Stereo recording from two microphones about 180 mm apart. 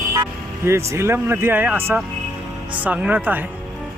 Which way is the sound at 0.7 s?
15° right (ahead or behind).